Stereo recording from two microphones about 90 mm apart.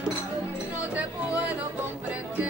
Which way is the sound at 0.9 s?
15° right (ahead or behind).